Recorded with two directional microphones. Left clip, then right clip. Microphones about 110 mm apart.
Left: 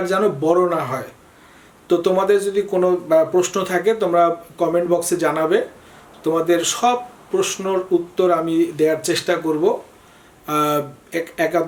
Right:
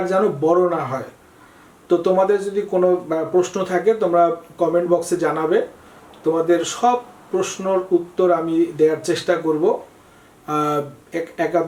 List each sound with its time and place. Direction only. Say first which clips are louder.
0.0 s speech: even; 15° left (ahead or behind)